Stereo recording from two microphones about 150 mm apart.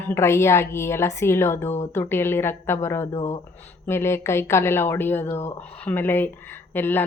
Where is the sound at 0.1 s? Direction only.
15° left (ahead or behind).